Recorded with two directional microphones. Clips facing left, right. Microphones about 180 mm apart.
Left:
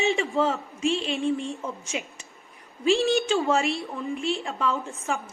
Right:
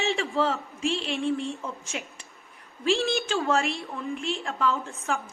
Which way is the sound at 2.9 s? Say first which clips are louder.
Left 4 dB; 35° left (ahead or behind).